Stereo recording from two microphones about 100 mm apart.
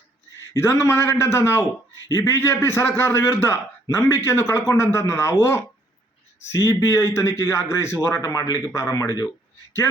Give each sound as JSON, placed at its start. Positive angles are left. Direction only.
{"t": 0.5, "sound": "a man's voice", "side_deg": 25}